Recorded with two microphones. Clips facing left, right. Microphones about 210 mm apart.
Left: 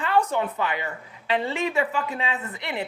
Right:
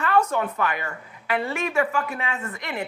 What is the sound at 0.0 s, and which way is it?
Speech, 15° left (ahead or behind).